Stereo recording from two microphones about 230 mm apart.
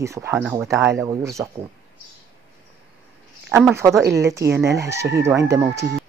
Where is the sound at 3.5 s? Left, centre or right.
Centre.